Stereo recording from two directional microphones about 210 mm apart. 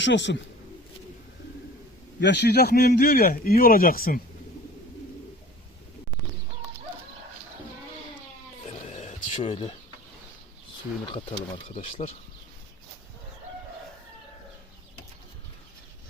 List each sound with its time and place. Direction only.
0.0 s a man's voice: 60° left (ahead or behind)
2.2 s speech: 55° left (ahead or behind)
8.6 s a sound: 35° left (ahead or behind)
11.1 s speech: 25° left (ahead or behind)